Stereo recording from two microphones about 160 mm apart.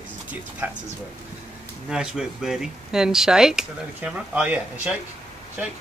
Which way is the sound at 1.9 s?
5° right (ahead or behind).